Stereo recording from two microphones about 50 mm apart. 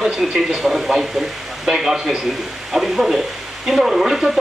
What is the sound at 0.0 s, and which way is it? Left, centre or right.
Speech, centre.